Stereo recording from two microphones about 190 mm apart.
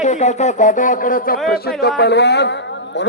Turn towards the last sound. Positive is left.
turn(degrees=65)  # may be behind; listen again after turning